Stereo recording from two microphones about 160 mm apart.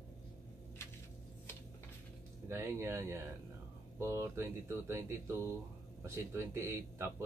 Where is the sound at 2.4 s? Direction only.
15° right (ahead or behind).